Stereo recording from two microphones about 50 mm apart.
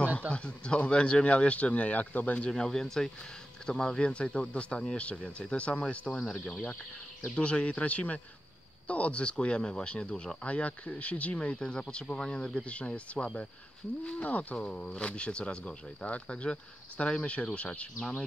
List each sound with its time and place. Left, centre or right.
0.3 s speech: left
2.5 s speech: centre
6.1 s speech: centre
6.5 s speech: left